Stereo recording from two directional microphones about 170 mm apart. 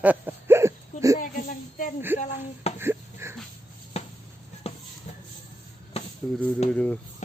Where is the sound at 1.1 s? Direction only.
50° left (ahead or behind).